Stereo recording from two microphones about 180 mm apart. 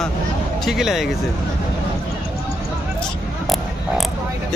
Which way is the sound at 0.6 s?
Centre (ahead or behind).